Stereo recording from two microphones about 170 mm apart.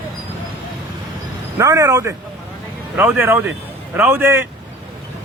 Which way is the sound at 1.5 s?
20° right (ahead or behind).